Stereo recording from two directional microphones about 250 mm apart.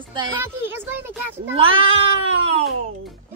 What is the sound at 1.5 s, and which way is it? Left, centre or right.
Speech, right.